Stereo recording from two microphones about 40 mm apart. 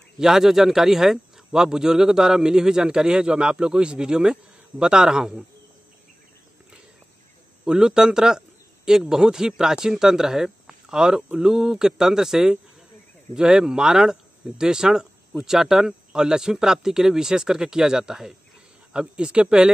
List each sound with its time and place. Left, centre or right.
0.2 s speech: centre
7.6 s a man's voice: right
18.9 s speech: right